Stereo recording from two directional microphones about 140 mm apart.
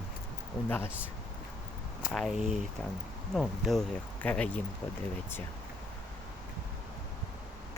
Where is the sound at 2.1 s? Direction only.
Centre (ahead or behind).